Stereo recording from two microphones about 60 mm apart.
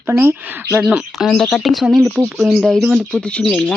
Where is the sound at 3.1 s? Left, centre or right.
Left.